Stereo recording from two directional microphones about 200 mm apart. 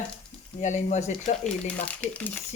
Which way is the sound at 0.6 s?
35° left (ahead or behind).